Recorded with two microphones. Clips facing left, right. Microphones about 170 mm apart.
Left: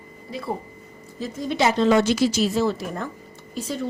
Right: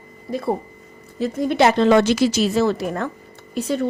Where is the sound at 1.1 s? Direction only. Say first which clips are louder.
Right 6 dB; 60° right (ahead or behind).